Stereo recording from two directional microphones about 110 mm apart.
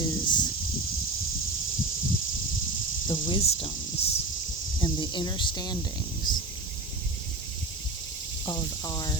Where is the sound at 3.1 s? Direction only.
55° left (ahead or behind).